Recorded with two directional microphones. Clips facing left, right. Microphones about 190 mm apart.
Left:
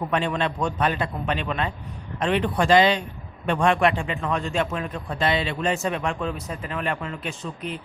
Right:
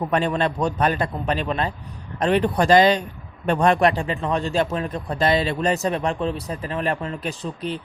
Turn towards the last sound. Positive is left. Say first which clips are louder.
# right 4 dB
turn(degrees=-35)  # may be behind; listen again after turning